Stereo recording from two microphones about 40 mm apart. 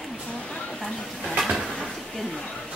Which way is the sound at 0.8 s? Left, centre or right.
Centre.